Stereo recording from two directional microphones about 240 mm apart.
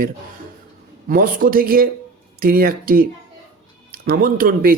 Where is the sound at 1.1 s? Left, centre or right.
Right.